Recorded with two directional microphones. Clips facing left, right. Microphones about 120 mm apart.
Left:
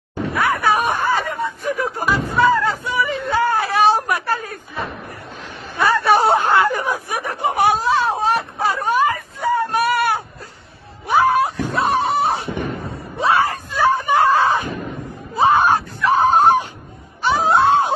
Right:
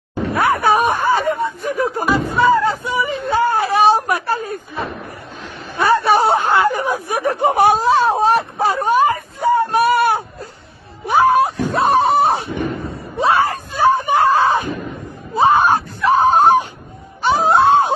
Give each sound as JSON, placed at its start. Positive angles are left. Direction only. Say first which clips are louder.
{"t": 0.3, "sound": "a sound", "louder": "right 3 dB", "side_deg": -30}
{"t": 2.3, "sound": "a sound", "louder": "right 1 dB", "side_deg": -20}
{"t": 5.8, "sound": "speech", "louder": "right 2 dB", "side_deg": -25}
{"t": 11.1, "sound": "wail", "louder": "right 2 dB", "side_deg": -25}
{"t": 13.2, "sound": "screaming", "louder": "right 2 dB", "side_deg": -30}
{"t": 15.3, "sound": "wail", "louder": "right 2 dB", "side_deg": -25}